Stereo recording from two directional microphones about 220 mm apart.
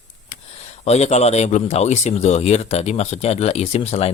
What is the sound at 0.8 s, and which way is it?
Speech, 30° left (ahead or behind).